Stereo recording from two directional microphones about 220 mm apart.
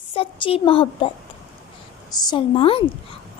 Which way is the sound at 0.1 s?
25° left (ahead or behind).